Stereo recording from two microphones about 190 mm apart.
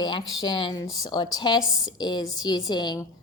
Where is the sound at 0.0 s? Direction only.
25° left (ahead or behind).